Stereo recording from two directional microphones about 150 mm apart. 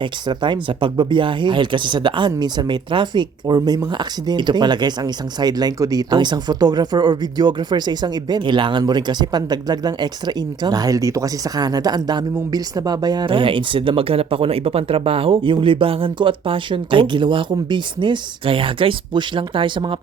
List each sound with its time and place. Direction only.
0.0 s speech: 30° right (ahead or behind)